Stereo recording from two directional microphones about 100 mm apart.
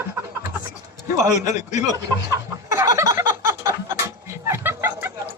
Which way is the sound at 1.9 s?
35° right (ahead or behind).